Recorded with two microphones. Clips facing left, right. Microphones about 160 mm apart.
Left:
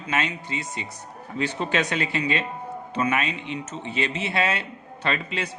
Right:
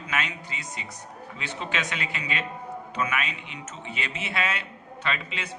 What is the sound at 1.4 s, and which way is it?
Speech, 40° left (ahead or behind).